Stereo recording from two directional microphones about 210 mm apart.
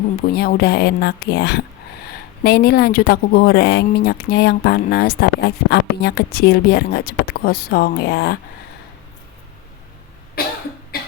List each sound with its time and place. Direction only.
0.3 s speech: 50° left (ahead or behind)